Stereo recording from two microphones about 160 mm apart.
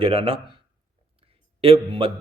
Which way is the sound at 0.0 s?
35° right (ahead or behind).